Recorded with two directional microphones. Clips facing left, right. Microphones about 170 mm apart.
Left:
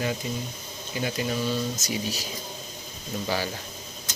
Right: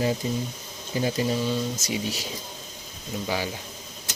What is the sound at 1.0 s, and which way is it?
Speech, 30° right (ahead or behind).